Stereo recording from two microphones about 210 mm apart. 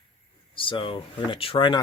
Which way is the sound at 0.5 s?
25° left (ahead or behind).